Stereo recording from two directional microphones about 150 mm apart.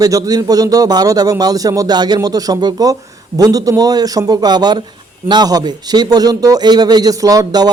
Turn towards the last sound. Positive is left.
turn(degrees=-25)  # may be behind; listen again after turning